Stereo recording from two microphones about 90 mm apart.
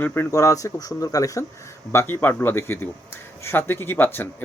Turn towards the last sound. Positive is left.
turn(degrees=20)  # may be behind; listen again after turning